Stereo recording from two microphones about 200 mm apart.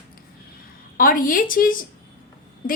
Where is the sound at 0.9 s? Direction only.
45° left (ahead or behind).